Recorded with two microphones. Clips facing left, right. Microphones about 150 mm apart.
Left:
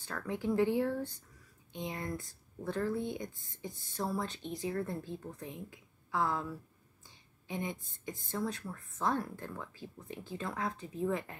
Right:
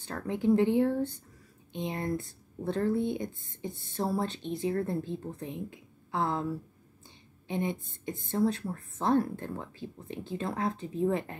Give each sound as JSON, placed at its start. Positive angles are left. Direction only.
{"t": 0.1, "sound": "speech", "side_deg": -35}
{"t": 0.4, "sound": "speech", "side_deg": -20}